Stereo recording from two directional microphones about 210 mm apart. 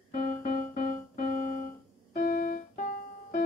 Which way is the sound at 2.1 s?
40° left (ahead or behind).